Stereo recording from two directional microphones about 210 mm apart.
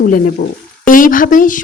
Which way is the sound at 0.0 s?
45° left (ahead or behind).